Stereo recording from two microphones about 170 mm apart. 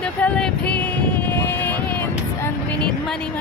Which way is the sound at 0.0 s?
5° left (ahead or behind).